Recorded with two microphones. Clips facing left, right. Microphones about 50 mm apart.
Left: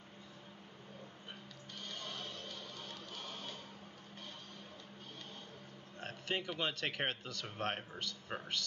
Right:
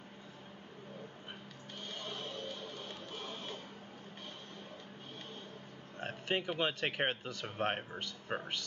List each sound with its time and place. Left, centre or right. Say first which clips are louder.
2.0 s music: right 4 dB; right
5.9 s speech: right 4 dB; centre